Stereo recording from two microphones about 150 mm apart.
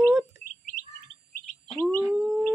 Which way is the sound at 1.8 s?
15° left (ahead or behind).